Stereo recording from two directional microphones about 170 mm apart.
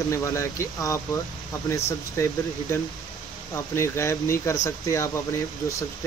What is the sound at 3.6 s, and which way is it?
Speech, 15° left (ahead or behind).